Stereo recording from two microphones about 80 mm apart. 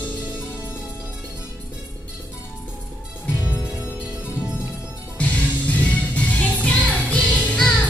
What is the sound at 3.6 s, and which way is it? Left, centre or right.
Music, centre.